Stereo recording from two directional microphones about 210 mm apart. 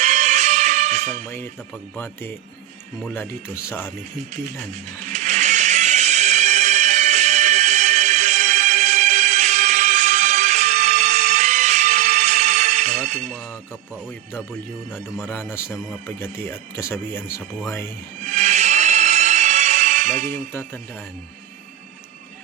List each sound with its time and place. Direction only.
0.0 s music: 35° right (ahead or behind)
3.0 s speech: 10° left (ahead or behind)
4.7 s music: 35° right (ahead or behind)
14.9 s speech: 10° left (ahead or behind)
18.2 s music: 35° right (ahead or behind)